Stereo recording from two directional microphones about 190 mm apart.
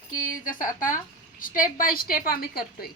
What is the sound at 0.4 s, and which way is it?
A woman's voice, 45° left (ahead or behind).